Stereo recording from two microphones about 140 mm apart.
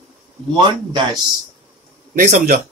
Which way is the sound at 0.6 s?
35° right (ahead or behind).